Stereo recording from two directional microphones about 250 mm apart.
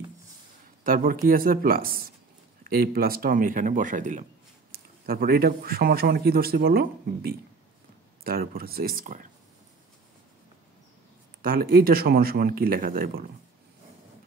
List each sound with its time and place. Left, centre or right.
0.8 s speech: right
11.4 s speech: right